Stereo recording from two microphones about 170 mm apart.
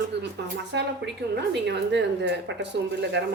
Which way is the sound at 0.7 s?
85° right.